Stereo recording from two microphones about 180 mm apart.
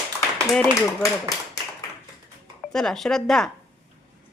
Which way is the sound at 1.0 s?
20° left (ahead or behind).